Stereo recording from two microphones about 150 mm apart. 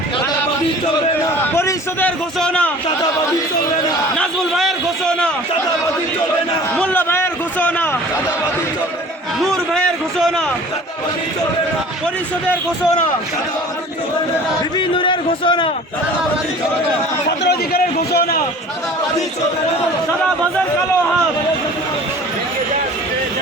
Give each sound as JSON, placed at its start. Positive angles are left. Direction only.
{"t": 1.5, "sound": "a man's voice", "side_deg": 15}
{"t": 4.2, "sound": "a man's voice", "side_deg": 0}
{"t": 6.7, "sound": "a man's voice", "side_deg": 10}
{"t": 9.5, "sound": "a man's voice", "side_deg": 0}
{"t": 14.8, "sound": "a man's voice", "side_deg": 35}
{"t": 17.2, "sound": "a man's voice", "side_deg": 90}